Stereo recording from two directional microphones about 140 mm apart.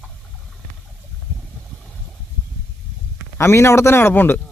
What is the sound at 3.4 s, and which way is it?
A man's voice, 20° left (ahead or behind).